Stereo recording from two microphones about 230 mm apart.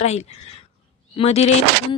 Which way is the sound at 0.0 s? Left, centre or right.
Left.